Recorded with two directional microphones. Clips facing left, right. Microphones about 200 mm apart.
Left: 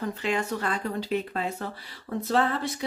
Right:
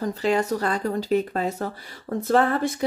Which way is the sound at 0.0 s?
40° right (ahead or behind).